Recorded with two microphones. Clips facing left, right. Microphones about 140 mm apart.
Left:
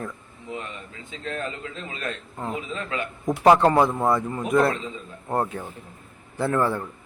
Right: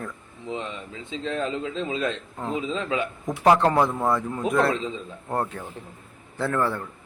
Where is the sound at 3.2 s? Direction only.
5° left (ahead or behind).